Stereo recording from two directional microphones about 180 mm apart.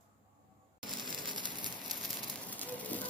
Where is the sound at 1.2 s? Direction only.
25° right (ahead or behind).